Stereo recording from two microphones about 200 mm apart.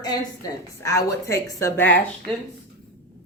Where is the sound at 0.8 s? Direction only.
15° left (ahead or behind).